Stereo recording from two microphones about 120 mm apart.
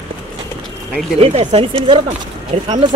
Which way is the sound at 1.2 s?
65° right (ahead or behind).